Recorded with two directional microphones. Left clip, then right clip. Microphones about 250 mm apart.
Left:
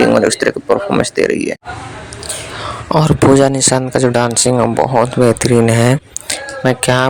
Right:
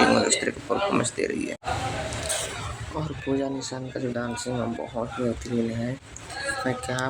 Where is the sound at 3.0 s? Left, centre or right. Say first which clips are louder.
Left 19 dB; left.